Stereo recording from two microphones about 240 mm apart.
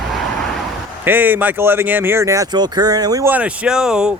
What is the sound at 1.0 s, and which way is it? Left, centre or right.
Speech, centre.